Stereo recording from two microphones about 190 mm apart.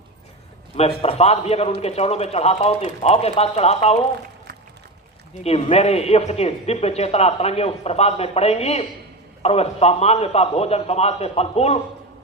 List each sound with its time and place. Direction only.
0.8 s speech: 30° left (ahead or behind)
5.4 s speech: 35° left (ahead or behind)